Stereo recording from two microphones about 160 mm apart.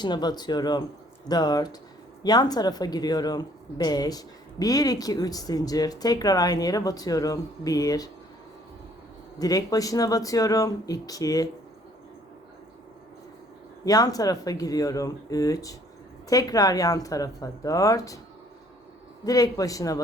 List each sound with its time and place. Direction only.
0.0 s speech: 25° left (ahead or behind)
9.4 s speech: 20° left (ahead or behind)
13.8 s speech: 25° left (ahead or behind)
19.2 s speech: 20° left (ahead or behind)